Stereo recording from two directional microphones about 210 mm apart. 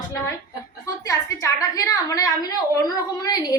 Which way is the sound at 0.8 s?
15° left (ahead or behind).